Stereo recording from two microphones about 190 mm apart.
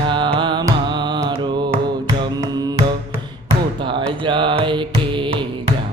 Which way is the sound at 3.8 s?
25° right (ahead or behind).